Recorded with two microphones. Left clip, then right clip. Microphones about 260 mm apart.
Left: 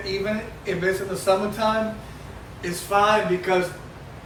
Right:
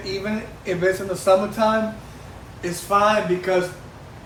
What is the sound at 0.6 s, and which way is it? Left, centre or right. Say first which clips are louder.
Speech: right 4 dB; centre.